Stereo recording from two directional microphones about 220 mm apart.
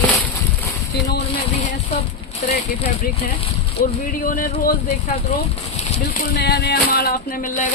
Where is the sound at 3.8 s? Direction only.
40° left (ahead or behind).